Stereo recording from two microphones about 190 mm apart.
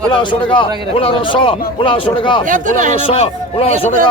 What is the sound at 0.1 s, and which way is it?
A man's voice, 25° left (ahead or behind).